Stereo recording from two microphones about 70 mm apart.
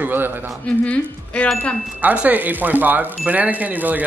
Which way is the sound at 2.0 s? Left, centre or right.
Right.